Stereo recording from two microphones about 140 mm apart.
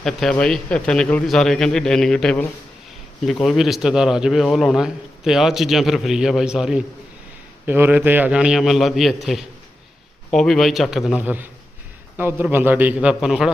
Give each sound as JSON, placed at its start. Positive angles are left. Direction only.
{"t": 0.0, "sound": "a man's voice", "side_deg": 5}